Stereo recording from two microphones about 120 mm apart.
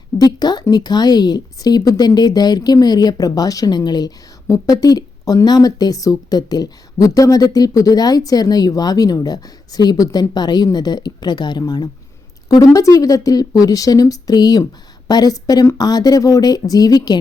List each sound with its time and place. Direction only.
0.2 s a woman's voice: 35° left (ahead or behind)